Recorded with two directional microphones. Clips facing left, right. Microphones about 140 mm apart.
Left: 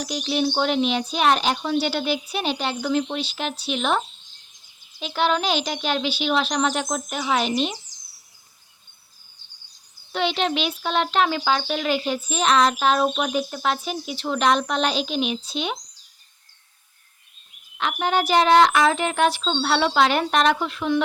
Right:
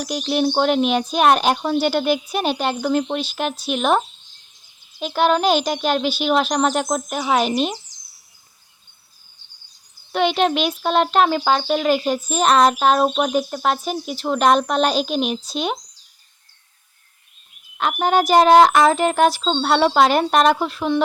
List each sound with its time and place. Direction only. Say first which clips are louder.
0.0 s a child's voice: right 3 dB; 50° right (ahead or behind)
10.1 s a child's voice: right 5 dB; 50° right (ahead or behind)
17.7 s a woman's voice: right 5 dB; 45° right (ahead or behind)